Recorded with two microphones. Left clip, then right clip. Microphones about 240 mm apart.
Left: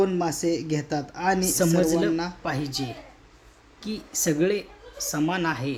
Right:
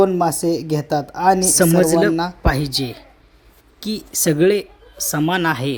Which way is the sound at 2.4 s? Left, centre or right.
Right.